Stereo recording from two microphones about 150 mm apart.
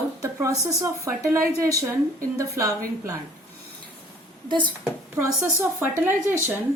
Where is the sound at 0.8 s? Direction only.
20° right (ahead or behind).